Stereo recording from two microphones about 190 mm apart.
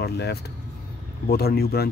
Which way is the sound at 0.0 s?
60° left (ahead or behind).